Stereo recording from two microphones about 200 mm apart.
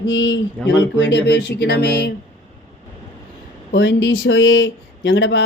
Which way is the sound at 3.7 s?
60° left (ahead or behind).